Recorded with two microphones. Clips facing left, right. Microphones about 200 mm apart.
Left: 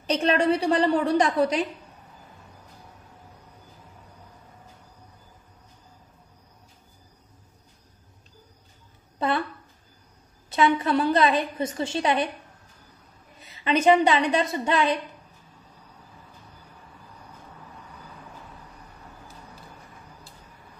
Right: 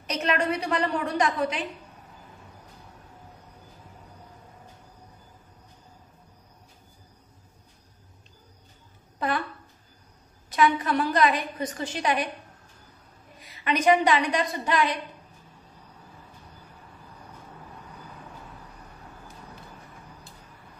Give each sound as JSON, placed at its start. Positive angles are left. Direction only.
{"t": 0.0, "sound": "a woman's voice", "side_deg": 30}
{"t": 10.5, "sound": "a woman's voice", "side_deg": 25}
{"t": 13.4, "sound": "a woman's voice", "side_deg": 25}